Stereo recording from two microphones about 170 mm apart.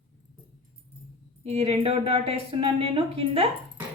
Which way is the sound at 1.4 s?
35° right (ahead or behind).